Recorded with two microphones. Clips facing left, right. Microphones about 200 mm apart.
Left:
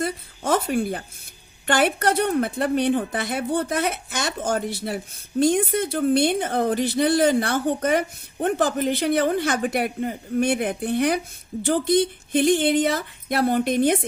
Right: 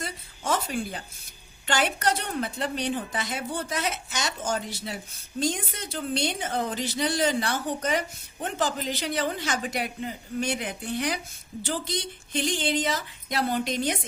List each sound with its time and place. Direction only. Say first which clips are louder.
0.0 s a woman's voice: left 8 dB; 55° left (ahead or behind)